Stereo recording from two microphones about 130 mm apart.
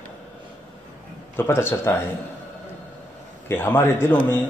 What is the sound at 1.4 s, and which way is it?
Speech, 20° left (ahead or behind).